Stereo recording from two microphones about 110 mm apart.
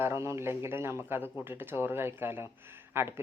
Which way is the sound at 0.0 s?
25° right (ahead or behind).